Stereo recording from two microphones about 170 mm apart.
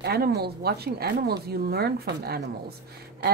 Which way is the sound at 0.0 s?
70° right (ahead or behind).